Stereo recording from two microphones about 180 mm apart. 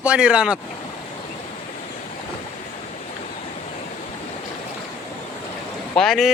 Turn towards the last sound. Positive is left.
turn(degrees=0)  # may be behind; listen again after turning